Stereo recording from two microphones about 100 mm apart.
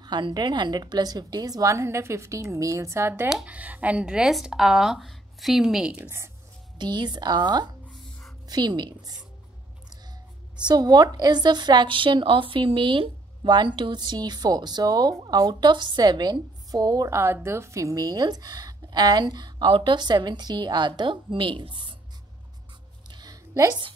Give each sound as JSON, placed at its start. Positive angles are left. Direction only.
{"t": 0.0, "sound": "a woman's voice", "side_deg": -45}
{"t": 3.3, "sound": "speech", "side_deg": -10}
{"t": 5.9, "sound": "a woman's voice", "side_deg": -25}
{"t": 6.8, "sound": "a woman's voice", "side_deg": -45}
{"t": 7.9, "sound": "a sound", "side_deg": 0}
{"t": 8.5, "sound": "a woman's voice", "side_deg": -45}
{"t": 10.6, "sound": "a woman's voice", "side_deg": -45}
{"t": 17.1, "sound": "a woman's voice", "side_deg": -25}
{"t": 23.0, "sound": "a sound", "side_deg": -45}